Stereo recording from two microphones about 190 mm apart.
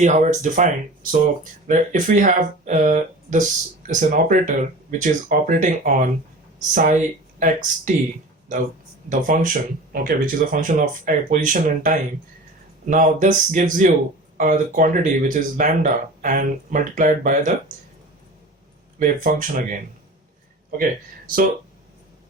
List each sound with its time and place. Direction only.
0.0 s speech: 40° right (ahead or behind)
9.0 s speech: 45° right (ahead or behind)
18.9 s speech: 45° right (ahead or behind)